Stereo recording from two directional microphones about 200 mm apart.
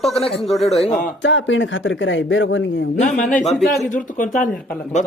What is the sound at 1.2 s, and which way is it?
Speech, 70° left (ahead or behind).